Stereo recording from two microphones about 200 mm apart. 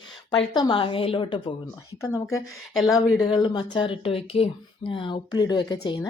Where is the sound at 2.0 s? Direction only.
15° left (ahead or behind).